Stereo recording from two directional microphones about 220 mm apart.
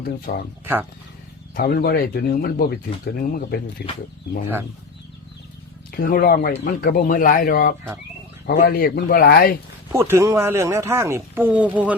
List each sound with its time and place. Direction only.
0.3 s speech: 40° left (ahead or behind)
0.6 s speech: 10° right (ahead or behind)
1.5 s speech: 45° left (ahead or behind)
5.9 s speech: 40° left (ahead or behind)
9.9 s speech: 10° right (ahead or behind)